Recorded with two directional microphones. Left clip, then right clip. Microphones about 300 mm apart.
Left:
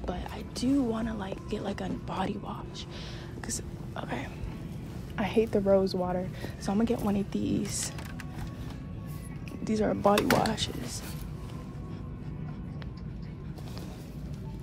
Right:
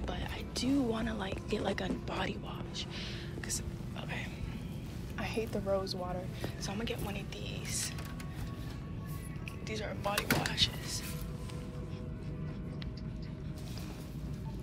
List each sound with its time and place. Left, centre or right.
0.0 s speech: centre
3.4 s whispering: left
5.1 s a woman's voice: left
9.7 s a woman's voice: left